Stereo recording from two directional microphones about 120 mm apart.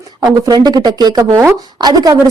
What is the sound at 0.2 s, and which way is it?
A woman's voice, 35° right (ahead or behind).